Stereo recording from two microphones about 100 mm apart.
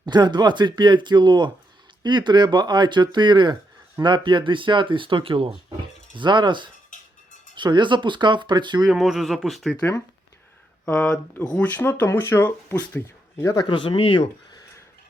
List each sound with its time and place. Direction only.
0.0 s speech: 45° right (ahead or behind); by 5.5 s 65° right (ahead or behind)
6.1 s speech: 50° right (ahead or behind)
8.9 s speech: 5° right (ahead or behind)
10.8 s speech: 10° left (ahead or behind); by 13.6 s 30° left (ahead or behind)
13.6 s speech: 55° left (ahead or behind)